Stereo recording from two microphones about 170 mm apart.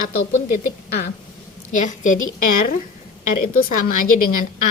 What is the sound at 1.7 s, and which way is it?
Speech, 50° left (ahead or behind).